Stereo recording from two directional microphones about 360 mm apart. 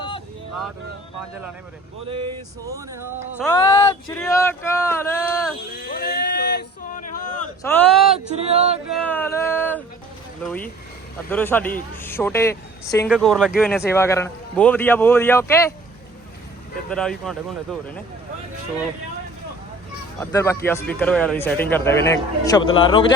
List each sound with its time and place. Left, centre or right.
2.0 s female singing: centre
3.4 s speech: centre
5.9 s a sound: left
7.6 s a sound: centre
8.4 s female singing: centre
8.9 s a man's voice: centre
16.9 s a man's voice: centre
20.1 s speech: centre